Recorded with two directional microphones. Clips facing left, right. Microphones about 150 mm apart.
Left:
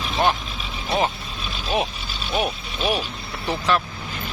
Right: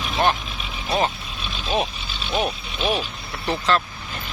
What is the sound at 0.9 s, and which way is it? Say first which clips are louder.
Speech: even; 15° left (ahead or behind).